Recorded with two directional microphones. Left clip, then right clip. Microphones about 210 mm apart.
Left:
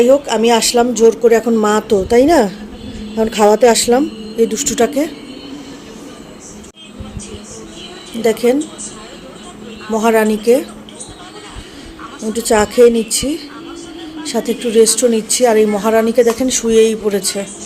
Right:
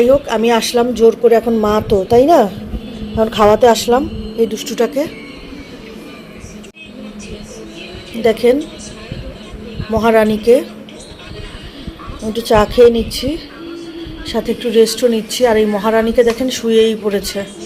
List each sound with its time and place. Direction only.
0.0 s a woman's voice: 10° left (ahead or behind)
8.2 s a woman's voice: 10° left (ahead or behind)
9.9 s a woman's voice: 10° left (ahead or behind)
12.3 s a woman's voice: 15° left (ahead or behind)